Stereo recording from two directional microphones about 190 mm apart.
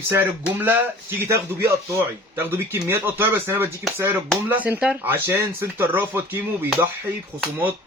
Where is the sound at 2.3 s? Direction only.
10° right (ahead or behind).